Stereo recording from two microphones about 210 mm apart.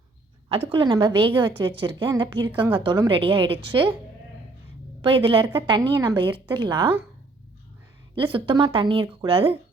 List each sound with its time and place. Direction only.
0.7 s speech: 20° right (ahead or behind)
5.0 s speech: 25° right (ahead or behind)
8.1 s speech: 25° right (ahead or behind)